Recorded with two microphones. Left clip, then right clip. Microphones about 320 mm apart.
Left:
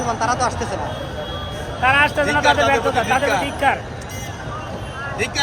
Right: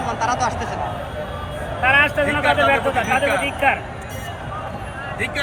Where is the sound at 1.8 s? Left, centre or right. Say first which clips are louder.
Even; left.